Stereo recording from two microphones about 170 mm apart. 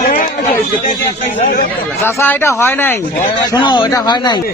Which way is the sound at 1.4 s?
50° left (ahead or behind).